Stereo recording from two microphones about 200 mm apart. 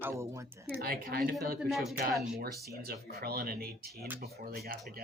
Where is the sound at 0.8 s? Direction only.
45° right (ahead or behind).